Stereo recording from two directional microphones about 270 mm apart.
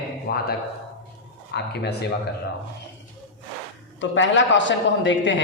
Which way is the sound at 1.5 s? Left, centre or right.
Left.